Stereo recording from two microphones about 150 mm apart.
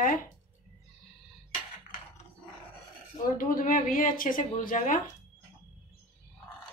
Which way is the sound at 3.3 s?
65° left (ahead or behind).